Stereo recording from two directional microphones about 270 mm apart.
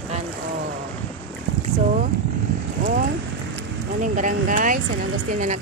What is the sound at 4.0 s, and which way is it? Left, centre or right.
Speech, right.